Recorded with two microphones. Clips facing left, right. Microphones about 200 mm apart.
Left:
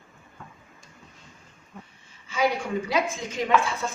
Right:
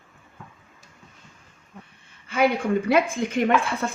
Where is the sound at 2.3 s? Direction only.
60° right (ahead or behind).